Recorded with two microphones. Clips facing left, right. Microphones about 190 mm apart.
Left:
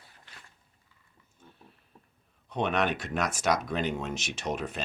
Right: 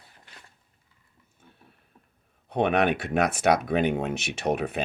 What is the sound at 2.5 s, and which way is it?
Speech, 60° right (ahead or behind).